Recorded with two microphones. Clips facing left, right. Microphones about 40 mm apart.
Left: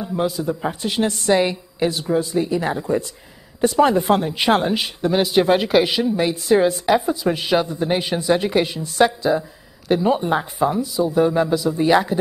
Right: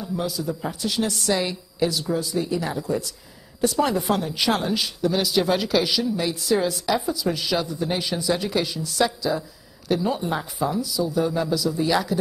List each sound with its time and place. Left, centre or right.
0.0 s speech: left